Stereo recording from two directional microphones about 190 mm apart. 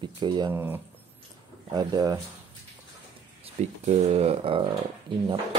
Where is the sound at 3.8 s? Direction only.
35° right (ahead or behind).